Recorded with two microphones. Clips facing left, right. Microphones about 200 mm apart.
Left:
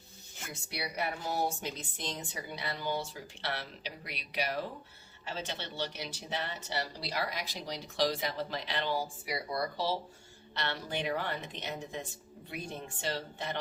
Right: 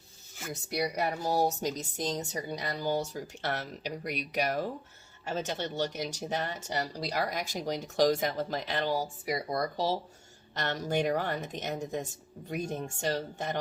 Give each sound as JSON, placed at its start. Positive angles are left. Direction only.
{"t": 0.7, "sound": "speech", "side_deg": -40}